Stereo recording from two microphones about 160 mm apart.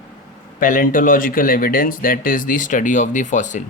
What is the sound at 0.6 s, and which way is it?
Speech, 55° left (ahead or behind).